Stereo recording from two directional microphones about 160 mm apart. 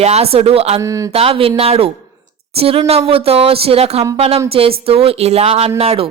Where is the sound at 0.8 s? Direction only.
20° right (ahead or behind).